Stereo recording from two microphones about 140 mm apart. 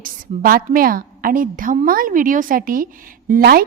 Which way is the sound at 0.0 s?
85° right.